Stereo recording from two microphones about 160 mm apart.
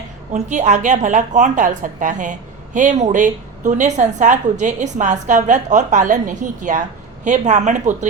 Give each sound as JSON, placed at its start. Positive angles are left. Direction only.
{"t": 0.3, "sound": "a woman's voice", "side_deg": -45}